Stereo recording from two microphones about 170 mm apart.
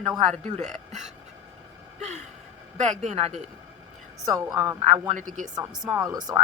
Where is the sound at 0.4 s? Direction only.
45° right (ahead or behind).